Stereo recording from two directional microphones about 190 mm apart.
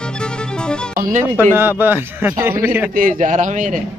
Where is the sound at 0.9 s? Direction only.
45° right (ahead or behind).